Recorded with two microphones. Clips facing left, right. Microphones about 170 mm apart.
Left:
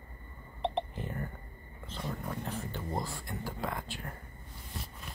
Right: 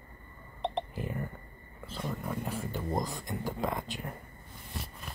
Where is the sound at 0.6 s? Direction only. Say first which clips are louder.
Even; 5° right (ahead or behind).